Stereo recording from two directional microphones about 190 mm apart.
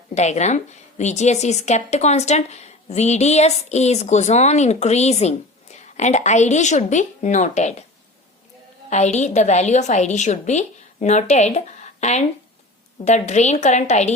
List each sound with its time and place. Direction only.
0.1 s a woman's voice: 35° left (ahead or behind)
8.9 s a woman's voice: 35° left (ahead or behind)